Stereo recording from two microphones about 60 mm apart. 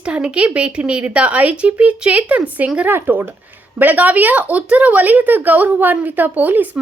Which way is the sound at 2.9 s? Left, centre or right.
Right.